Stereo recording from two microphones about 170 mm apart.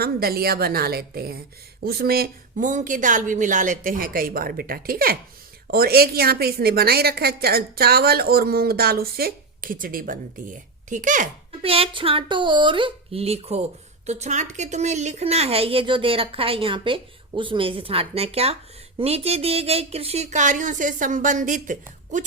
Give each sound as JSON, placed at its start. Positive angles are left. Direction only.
{"t": 0.0, "sound": "a woman's voice", "side_deg": -65}
{"t": 11.6, "sound": "a woman's voice", "side_deg": -35}